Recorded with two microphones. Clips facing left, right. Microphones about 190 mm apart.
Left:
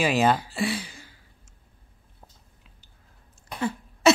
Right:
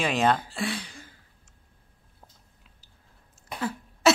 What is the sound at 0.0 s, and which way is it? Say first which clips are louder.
Speech: left 2 dB; 5° left (ahead or behind).